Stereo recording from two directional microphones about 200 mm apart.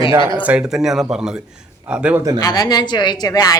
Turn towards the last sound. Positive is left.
turn(degrees=20)  # may be behind; listen again after turning